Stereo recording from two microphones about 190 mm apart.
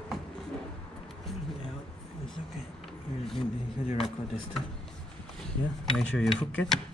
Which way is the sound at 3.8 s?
30° left (ahead or behind).